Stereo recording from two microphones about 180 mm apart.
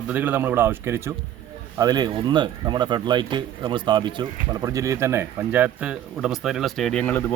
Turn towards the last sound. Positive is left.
turn(degrees=5)  # may be behind; listen again after turning